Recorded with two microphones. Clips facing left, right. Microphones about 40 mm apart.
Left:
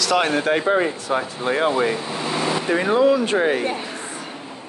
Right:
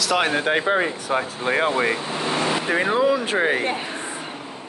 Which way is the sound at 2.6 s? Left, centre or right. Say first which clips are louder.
Left 1 dB; centre.